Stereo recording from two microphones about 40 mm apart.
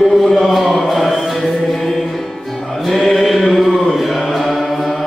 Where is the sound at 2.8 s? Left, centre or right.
Centre.